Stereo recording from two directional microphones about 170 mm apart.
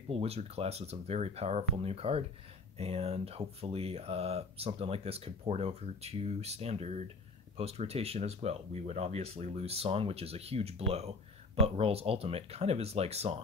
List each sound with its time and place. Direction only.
0.1 s speech: 35° right (ahead or behind)